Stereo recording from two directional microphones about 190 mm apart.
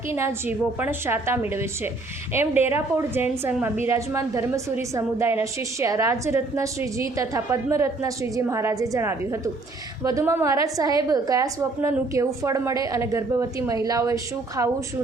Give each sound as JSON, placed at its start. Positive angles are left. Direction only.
{"t": 0.1, "sound": "a woman's voice", "side_deg": -15}